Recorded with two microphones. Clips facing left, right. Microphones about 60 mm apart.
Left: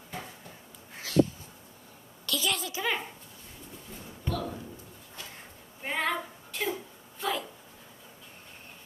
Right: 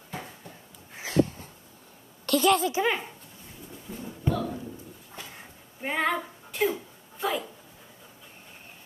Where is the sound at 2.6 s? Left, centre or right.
Right.